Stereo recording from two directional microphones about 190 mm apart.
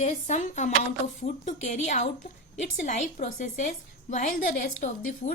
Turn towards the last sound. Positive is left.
turn(degrees=40)  # may be behind; listen again after turning